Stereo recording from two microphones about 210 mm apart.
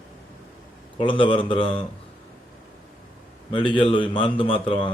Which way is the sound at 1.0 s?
25° left (ahead or behind).